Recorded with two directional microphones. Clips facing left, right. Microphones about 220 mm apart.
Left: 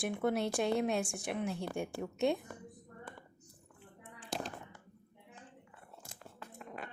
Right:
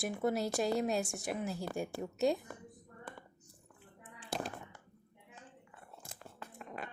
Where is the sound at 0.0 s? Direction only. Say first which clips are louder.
Left 1 dB; centre (ahead or behind).